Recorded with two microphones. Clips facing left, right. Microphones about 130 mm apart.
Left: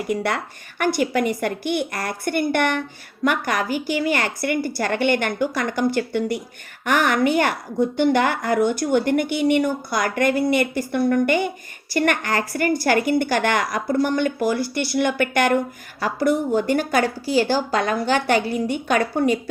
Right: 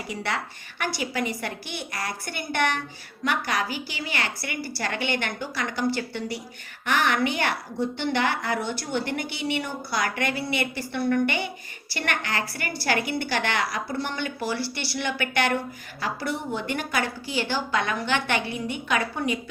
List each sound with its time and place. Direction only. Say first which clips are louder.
0.1 s a woman's voice: left 6 dB; 55° left (ahead or behind)